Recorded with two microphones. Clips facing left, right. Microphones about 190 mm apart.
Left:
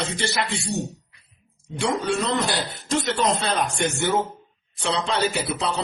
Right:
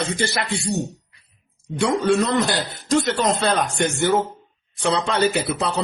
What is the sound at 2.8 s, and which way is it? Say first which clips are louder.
Speech: right 3 dB; 45° right (ahead or behind).